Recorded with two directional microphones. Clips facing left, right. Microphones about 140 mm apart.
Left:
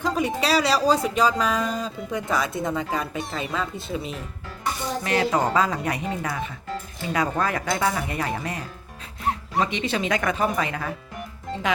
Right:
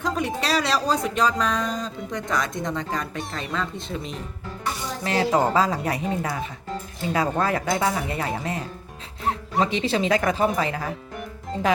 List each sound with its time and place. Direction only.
0.0 s speech: centre (ahead or behind)
5.0 s a woman's voice: 30° right (ahead or behind)